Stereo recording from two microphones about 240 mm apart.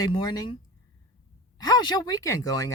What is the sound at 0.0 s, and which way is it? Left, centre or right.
Speech, centre.